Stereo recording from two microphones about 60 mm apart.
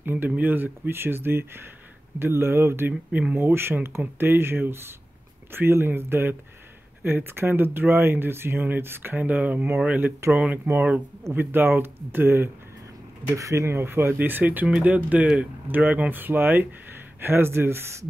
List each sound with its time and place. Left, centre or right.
0.0 s speech: right
2.9 s speech: right
3.5 s speech: right
11.3 s speech: right
13.4 s speech: right